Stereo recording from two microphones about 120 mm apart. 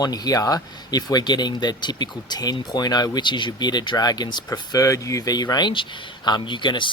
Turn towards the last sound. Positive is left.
turn(degrees=40)  # may be behind; listen again after turning